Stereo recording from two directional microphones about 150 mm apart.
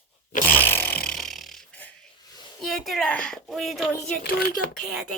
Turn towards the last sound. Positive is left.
turn(degrees=0)  # may be behind; listen again after turning